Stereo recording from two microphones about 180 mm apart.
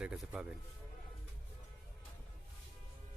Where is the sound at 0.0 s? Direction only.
5° right (ahead or behind).